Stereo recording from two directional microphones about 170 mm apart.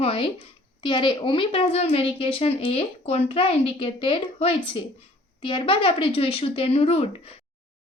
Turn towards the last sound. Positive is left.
turn(degrees=35)  # may be behind; listen again after turning